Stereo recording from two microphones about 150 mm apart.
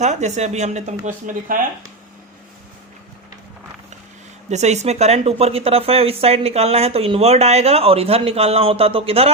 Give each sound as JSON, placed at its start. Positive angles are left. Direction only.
{"t": 0.0, "sound": "speech", "side_deg": -50}
{"t": 1.0, "sound": "speech", "side_deg": -65}
{"t": 4.4, "sound": "speech", "side_deg": -50}